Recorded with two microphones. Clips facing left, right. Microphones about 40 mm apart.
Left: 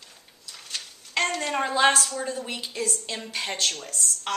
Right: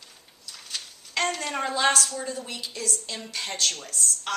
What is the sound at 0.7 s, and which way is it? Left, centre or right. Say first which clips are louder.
A woman's voice: left 2 dB; centre.